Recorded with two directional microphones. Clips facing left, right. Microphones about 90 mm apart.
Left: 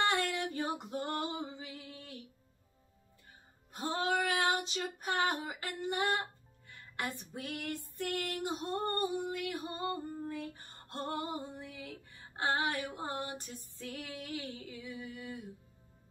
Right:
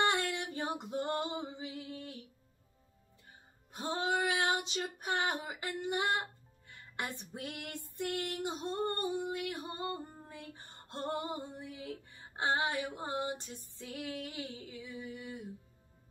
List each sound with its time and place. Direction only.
0.0 s female singing: 20° right (ahead or behind)
3.7 s female singing: 20° right (ahead or behind)
9.3 s music: 25° right (ahead or behind)